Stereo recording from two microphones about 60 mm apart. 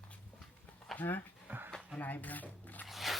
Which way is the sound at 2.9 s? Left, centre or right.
Centre.